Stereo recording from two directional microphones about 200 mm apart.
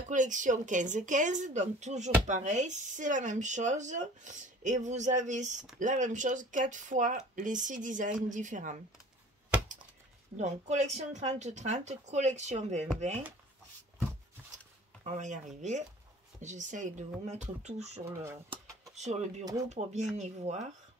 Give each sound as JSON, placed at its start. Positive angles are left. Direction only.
{"t": 0.1, "sound": "speech", "side_deg": -40}
{"t": 10.3, "sound": "speech", "side_deg": -35}
{"t": 15.0, "sound": "speech", "side_deg": -35}